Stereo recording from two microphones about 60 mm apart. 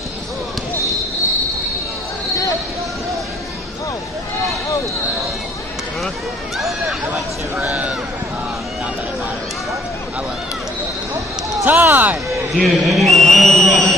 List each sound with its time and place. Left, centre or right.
6.5 s speech: centre
7.6 s speech: right
11.6 s speech: right
12.5 s a sound: centre